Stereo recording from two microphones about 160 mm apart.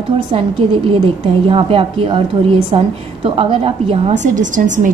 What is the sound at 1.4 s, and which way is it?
A woman's voice, 35° right (ahead or behind).